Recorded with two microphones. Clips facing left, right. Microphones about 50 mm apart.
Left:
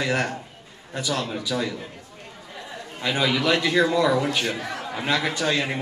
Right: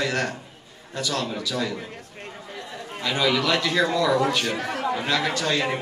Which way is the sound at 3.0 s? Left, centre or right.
Centre.